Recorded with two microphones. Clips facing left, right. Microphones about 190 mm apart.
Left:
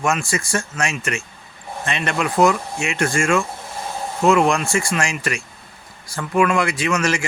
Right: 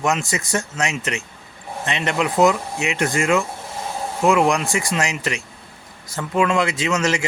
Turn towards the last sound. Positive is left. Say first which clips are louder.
# even
turn(degrees=-20)  # may be behind; listen again after turning